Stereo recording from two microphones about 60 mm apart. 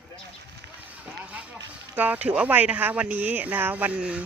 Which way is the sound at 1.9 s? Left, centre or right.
Right.